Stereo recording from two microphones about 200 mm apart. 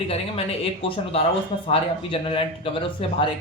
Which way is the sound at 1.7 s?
25° left (ahead or behind).